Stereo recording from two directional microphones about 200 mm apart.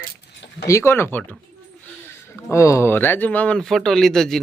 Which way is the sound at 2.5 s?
15° left (ahead or behind).